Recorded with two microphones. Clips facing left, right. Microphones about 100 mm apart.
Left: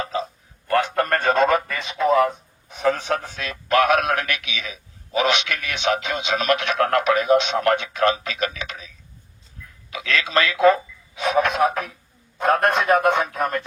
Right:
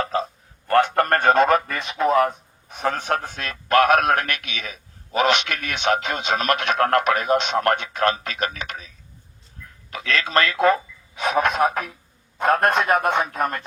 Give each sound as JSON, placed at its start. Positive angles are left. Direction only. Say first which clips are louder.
{"t": 0.0, "sound": "a sound", "louder": "right 2 dB", "side_deg": -55}
{"t": 2.6, "sound": "a man's voice", "louder": "left 2 dB", "side_deg": -50}
{"t": 9.9, "sound": "a man's voice", "louder": "even", "side_deg": -45}